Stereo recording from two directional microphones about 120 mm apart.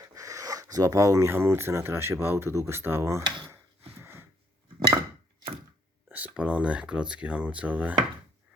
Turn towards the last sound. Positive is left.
turn(degrees=-10)  # may be behind; listen again after turning